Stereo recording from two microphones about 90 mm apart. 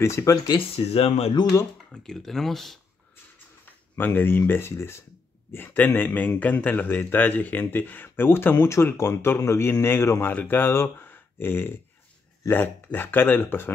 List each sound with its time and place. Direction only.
0.0 s speech: 35° left (ahead or behind)
0.5 s speech: 85° left
1.3 s speech: 50° left (ahead or behind)
1.9 s speech: 5° left (ahead or behind)
3.6 s a man's voice: 25° left (ahead or behind)
10.3 s a man's voice: 20° left (ahead or behind)